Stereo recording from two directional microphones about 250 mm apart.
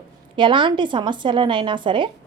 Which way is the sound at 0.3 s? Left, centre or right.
Centre.